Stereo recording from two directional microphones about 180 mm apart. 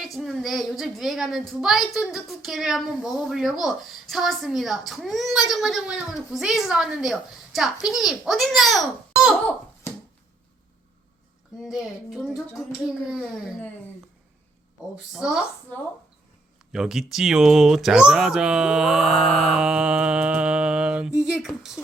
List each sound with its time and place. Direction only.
0.0 s speech: centre (ahead or behind)
11.6 s speech: centre (ahead or behind)
15.1 s speech: 5° right (ahead or behind)
16.7 s speech: centre (ahead or behind)